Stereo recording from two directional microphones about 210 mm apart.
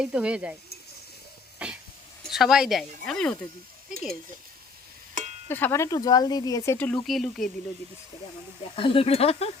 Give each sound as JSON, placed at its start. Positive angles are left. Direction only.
{"t": 0.0, "sound": "speech", "side_deg": -5}
{"t": 1.5, "sound": "a sound", "side_deg": -5}
{"t": 2.2, "sound": "speech", "side_deg": 0}
{"t": 5.5, "sound": "speech", "side_deg": 10}
{"t": 8.7, "sound": "speech", "side_deg": 25}